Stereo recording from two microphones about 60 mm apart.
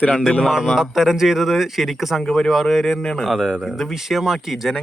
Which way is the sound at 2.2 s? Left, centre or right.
Centre.